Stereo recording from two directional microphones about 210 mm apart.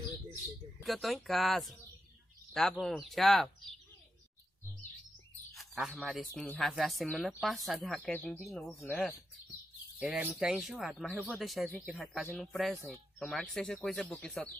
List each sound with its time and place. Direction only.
0.8 s speech: centre (ahead or behind)
5.5 s speech: centre (ahead or behind)